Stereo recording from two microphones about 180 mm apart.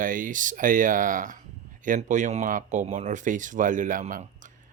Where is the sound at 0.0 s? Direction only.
50° right (ahead or behind).